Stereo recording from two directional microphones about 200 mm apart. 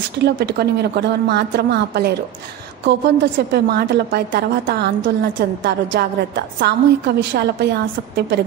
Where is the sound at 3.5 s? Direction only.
50° right (ahead or behind).